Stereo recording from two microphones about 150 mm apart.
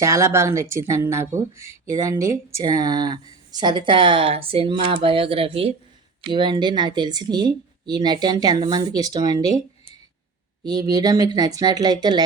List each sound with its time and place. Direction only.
0.0 s speech: 20° right (ahead or behind)
10.6 s speech: 25° right (ahead or behind)